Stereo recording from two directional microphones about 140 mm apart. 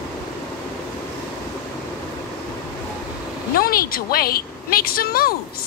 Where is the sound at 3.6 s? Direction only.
90° left.